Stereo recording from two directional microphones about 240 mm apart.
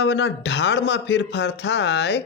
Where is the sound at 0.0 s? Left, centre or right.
Left.